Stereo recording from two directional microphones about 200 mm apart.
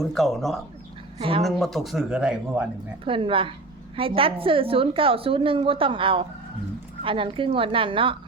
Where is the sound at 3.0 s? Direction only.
25° right (ahead or behind).